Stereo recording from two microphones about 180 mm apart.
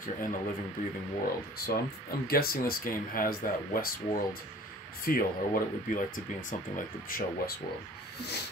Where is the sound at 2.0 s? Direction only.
55° left (ahead or behind).